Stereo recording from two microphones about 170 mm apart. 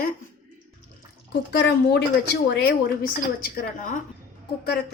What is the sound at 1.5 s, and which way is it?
A woman's voice, 75° left (ahead or behind).